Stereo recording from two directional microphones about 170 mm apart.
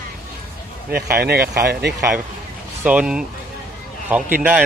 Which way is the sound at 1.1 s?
65° right (ahead or behind).